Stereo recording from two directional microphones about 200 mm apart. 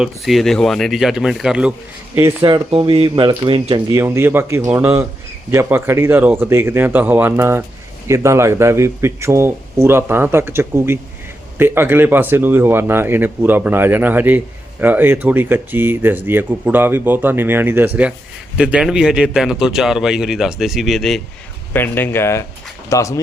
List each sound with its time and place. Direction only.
0.0 s a man's voice: centre (ahead or behind)
2.4 s speech: 25° right (ahead or behind)
4.0 s a man's voice: 10° right (ahead or behind); by 23.2 s 15° left (ahead or behind)